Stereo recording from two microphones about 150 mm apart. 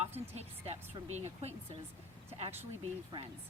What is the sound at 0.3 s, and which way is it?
A woman's voice, 45° right (ahead or behind).